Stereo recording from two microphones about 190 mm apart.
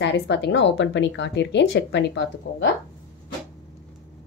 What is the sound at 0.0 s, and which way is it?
Speech, 65° left (ahead or behind).